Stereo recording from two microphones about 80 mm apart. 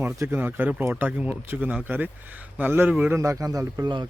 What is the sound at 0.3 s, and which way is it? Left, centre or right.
Speech, right.